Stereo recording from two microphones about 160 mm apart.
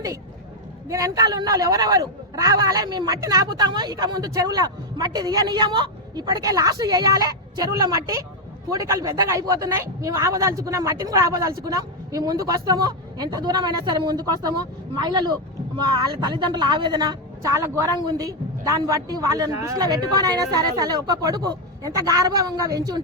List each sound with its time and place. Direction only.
0.9 s speech: 20° right (ahead or behind)